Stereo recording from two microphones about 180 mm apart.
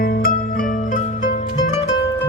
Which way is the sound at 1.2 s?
40° left (ahead or behind).